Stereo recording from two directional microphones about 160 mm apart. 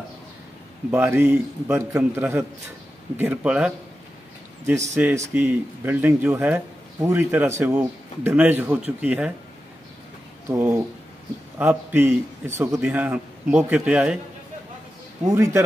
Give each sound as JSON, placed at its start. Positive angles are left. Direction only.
{"t": 0.9, "sound": "a man's voice", "side_deg": -15}
{"t": 10.5, "sound": "a man's voice", "side_deg": -10}
{"t": 15.2, "sound": "a man's voice", "side_deg": -20}